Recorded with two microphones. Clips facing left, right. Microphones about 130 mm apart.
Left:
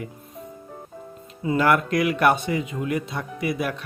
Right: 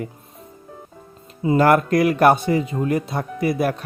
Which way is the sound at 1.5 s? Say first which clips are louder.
Right 5 dB; 40° right (ahead or behind).